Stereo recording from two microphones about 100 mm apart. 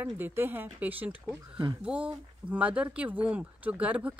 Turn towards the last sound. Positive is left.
turn(degrees=-15)  # may be behind; listen again after turning